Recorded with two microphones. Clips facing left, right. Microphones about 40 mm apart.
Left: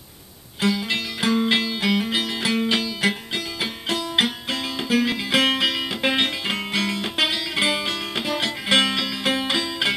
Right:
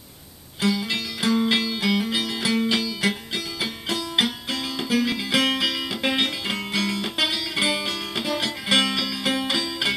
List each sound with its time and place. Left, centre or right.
0.6 s music: centre